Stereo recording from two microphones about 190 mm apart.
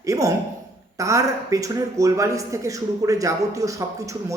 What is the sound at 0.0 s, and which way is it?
Speech, 15° right (ahead or behind).